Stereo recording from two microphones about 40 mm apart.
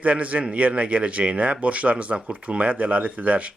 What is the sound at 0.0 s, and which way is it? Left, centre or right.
Speech, right.